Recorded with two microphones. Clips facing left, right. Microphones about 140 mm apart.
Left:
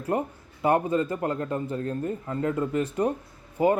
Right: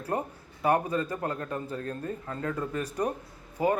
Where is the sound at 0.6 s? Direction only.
25° left (ahead or behind).